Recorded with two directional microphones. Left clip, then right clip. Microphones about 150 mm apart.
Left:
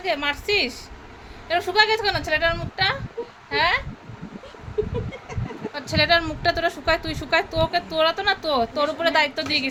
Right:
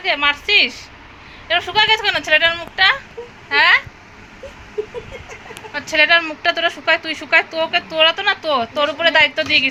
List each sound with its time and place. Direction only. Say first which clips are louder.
0.0 s a woman's voice: right 7 dB; 20° left (ahead or behind)
5.7 s a woman's voice: right 6 dB; 10° left (ahead or behind)